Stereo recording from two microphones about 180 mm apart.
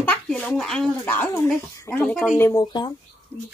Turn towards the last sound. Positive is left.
turn(degrees=10)  # may be behind; listen again after turning